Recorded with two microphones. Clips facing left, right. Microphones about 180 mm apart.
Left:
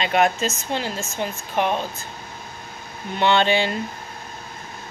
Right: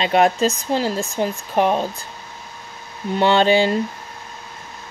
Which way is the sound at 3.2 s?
40° right (ahead or behind).